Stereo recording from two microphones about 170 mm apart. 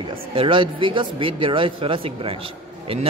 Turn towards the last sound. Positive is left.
turn(degrees=-35)  # may be behind; listen again after turning